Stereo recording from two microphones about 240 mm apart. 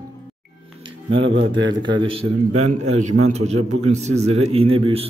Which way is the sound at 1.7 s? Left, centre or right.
Centre.